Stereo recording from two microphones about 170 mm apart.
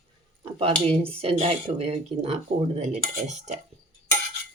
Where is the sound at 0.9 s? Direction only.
35° right (ahead or behind).